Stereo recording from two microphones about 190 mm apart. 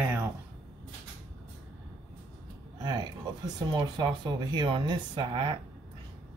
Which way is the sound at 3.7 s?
25° right (ahead or behind).